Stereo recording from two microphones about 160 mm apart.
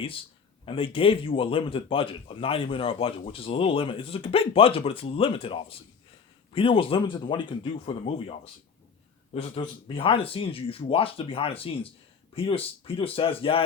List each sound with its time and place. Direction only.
0.6 s speech: 35° left (ahead or behind)